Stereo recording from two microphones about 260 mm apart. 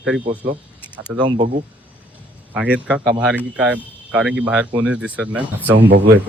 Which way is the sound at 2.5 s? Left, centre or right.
Centre.